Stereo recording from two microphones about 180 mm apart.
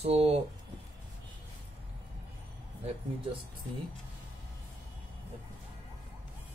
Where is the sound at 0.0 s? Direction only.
35° right (ahead or behind).